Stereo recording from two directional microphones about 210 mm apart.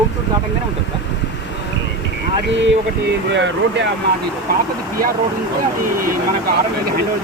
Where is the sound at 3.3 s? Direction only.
60° right (ahead or behind).